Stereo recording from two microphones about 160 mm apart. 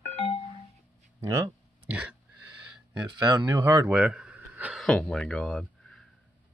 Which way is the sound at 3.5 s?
25° right (ahead or behind).